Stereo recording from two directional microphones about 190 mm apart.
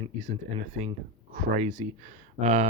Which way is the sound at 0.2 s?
40° right (ahead or behind).